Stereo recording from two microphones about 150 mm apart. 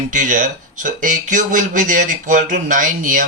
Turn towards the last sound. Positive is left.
turn(degrees=-60)  # may be behind; listen again after turning